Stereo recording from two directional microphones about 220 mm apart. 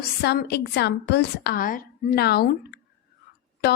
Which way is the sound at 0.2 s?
50° left (ahead or behind).